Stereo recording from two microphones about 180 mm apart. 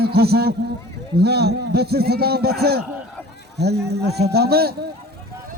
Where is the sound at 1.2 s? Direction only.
65° right (ahead or behind).